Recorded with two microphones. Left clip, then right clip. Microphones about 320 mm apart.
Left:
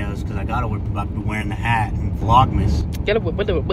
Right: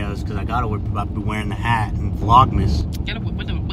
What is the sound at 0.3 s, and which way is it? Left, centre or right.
Speech, centre.